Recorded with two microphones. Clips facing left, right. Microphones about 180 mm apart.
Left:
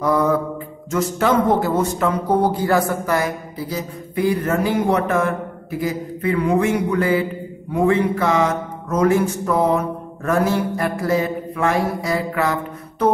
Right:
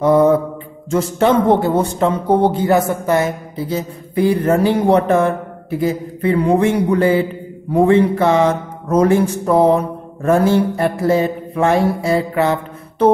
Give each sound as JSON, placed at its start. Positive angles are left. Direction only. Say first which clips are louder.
{"t": 0.0, "sound": "mantra", "louder": "right 6 dB", "side_deg": -25}
{"t": 0.8, "sound": "speech", "louder": "right 4 dB", "side_deg": -30}